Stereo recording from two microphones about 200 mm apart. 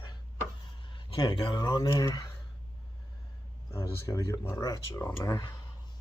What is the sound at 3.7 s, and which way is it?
Speech, 15° left (ahead or behind).